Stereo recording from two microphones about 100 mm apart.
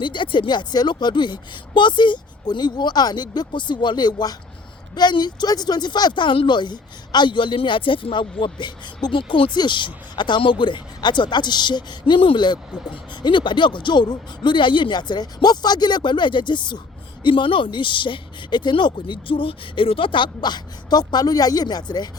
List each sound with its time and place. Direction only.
0.0 s speech: 55° left (ahead or behind)